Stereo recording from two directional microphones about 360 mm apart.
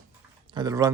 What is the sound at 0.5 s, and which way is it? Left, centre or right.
Speech, centre.